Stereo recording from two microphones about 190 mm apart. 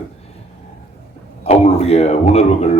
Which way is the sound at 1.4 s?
35° left (ahead or behind).